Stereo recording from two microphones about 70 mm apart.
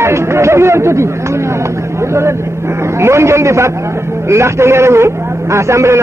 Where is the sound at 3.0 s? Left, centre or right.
Right.